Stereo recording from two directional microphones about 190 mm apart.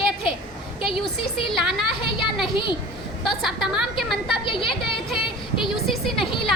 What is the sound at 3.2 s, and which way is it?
Speech, centre (ahead or behind).